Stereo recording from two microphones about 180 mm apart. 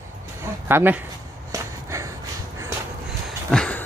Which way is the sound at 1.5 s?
15° right (ahead or behind).